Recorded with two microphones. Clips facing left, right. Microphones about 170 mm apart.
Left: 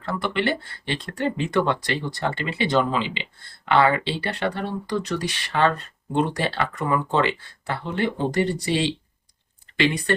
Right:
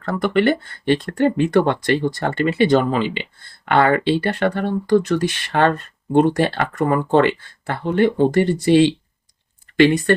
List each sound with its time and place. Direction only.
0.0 s speech: 45° right (ahead or behind)